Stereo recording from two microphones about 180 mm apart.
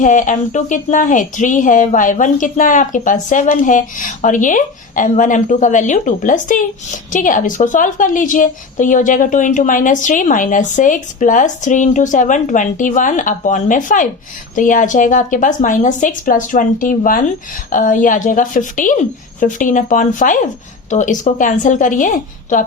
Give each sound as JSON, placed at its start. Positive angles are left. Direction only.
{"t": 0.0, "sound": "a woman's voice", "side_deg": 45}